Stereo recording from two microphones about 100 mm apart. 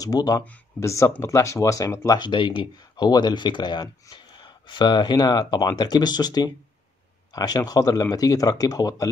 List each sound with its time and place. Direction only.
0.0 s speech: 40° left (ahead or behind)